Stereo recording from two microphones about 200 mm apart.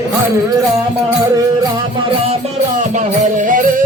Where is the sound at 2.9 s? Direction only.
40° right (ahead or behind).